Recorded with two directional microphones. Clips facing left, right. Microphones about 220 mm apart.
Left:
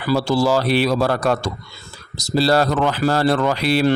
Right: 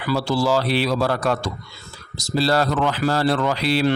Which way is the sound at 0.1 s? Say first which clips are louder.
Left 3 dB; 45° left (ahead or behind).